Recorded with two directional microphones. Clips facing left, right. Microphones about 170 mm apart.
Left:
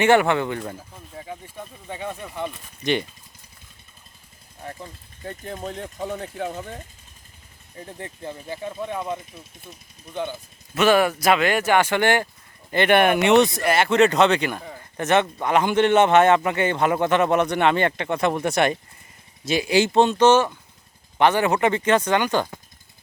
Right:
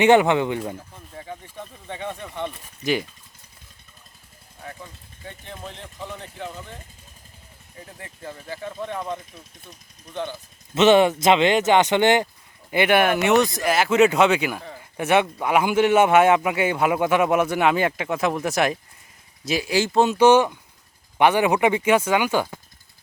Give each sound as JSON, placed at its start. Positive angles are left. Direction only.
{"t": 0.0, "sound": "speech", "side_deg": -15}
{"t": 0.8, "sound": "speech", "side_deg": 10}
{"t": 5.2, "sound": "speech", "side_deg": 45}
{"t": 7.9, "sound": "speech", "side_deg": 25}
{"t": 10.8, "sound": "speech", "side_deg": -20}
{"t": 12.7, "sound": "speech", "side_deg": -10}